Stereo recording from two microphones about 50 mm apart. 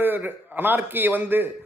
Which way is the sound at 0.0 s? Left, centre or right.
Right.